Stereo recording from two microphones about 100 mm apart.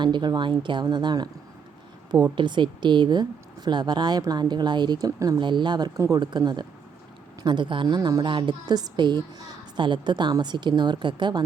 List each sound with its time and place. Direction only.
0.0 s a woman's voice: 50° right (ahead or behind)
5.4 s a woman's voice: 50° right (ahead or behind)